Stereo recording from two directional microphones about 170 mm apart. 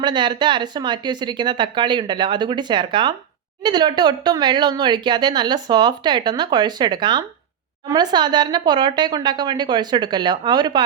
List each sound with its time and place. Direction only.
0.0 s speech: 25° right (ahead or behind)